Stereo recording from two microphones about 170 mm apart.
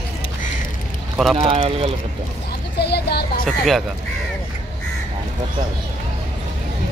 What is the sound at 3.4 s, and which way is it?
Speech, centre (ahead or behind).